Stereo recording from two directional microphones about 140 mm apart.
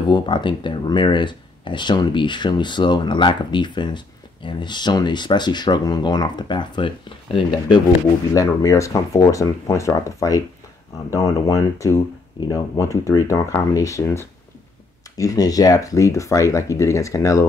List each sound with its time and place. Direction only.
0.1 s speech: 35° left (ahead or behind)
8.3 s speech: 25° left (ahead or behind)